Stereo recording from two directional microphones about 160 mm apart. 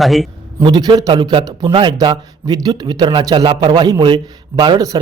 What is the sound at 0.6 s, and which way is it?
A man's voice, 25° right (ahead or behind).